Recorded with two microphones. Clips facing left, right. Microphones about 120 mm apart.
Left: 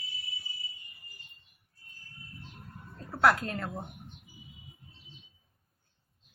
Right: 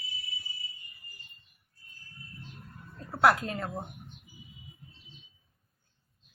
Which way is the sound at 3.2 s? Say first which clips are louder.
Right 1 dB; 10° right (ahead or behind).